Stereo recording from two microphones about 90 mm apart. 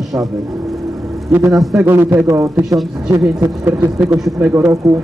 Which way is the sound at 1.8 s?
25° right (ahead or behind).